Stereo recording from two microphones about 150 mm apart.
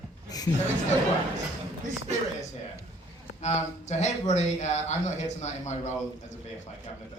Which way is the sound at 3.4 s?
50° left (ahead or behind).